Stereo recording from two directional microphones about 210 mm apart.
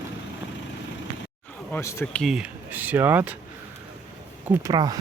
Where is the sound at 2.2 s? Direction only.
5° right (ahead or behind).